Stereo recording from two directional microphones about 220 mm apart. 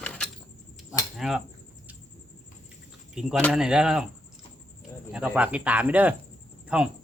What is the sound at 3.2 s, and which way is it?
Speech, centre (ahead or behind).